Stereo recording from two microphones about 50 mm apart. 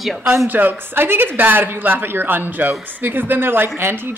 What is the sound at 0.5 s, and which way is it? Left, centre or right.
Speech, right.